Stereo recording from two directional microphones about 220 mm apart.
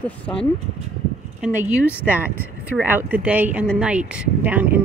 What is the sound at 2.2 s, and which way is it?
Speech, 10° left (ahead or behind).